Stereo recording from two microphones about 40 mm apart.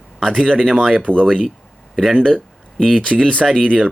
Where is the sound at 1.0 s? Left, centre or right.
Left.